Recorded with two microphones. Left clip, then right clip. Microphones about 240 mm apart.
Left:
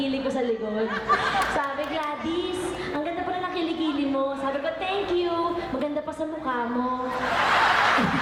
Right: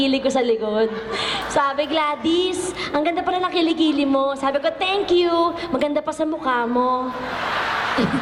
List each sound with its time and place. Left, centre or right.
0.0 s a woman's voice: centre
2.0 s a woman's voice: centre
4.4 s a woman's voice: centre